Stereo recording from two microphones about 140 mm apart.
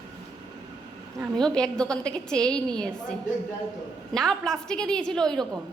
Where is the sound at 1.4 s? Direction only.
5° left (ahead or behind).